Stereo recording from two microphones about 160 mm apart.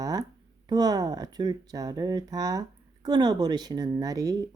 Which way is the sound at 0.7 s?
25° right (ahead or behind).